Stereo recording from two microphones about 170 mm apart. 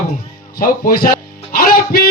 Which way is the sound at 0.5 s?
60° left (ahead or behind).